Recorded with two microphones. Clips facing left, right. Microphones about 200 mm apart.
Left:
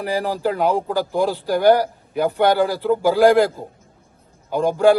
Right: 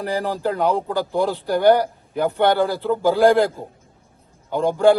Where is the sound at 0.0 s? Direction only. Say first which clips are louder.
Left 1 dB; 15° left (ahead or behind).